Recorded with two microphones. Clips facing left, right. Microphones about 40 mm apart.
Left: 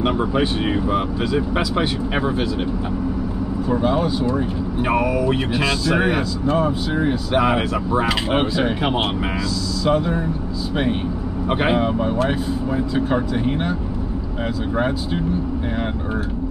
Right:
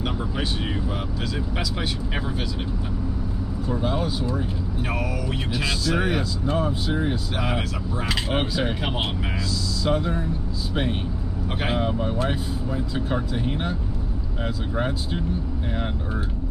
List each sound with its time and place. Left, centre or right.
0.4 s speech: left
3.8 s speech: centre
4.8 s speech: left; by 10.2 s centre
11.4 s speech: left